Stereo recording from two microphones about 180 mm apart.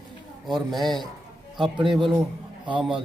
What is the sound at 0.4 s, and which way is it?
Speech, centre (ahead or behind).